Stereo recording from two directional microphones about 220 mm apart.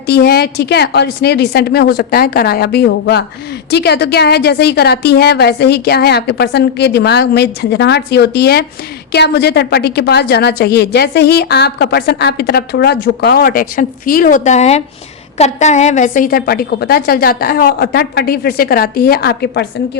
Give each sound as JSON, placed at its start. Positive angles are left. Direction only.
{"t": 0.1, "sound": "a woman's voice", "side_deg": 45}